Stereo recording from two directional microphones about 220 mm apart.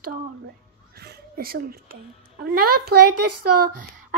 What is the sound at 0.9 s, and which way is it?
A child's voice, 45° right (ahead or behind).